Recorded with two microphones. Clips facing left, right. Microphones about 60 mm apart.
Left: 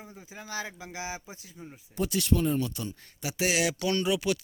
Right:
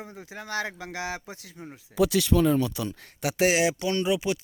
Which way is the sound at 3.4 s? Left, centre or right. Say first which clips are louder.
Right 3 dB; right.